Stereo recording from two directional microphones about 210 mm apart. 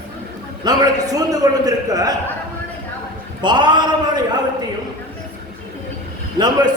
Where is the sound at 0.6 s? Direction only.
20° right (ahead or behind).